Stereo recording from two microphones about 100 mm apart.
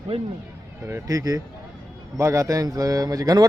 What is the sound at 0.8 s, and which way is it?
Speech, 30° right (ahead or behind).